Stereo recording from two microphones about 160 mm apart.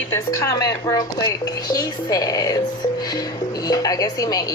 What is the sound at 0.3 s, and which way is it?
A woman's voice, 20° left (ahead or behind).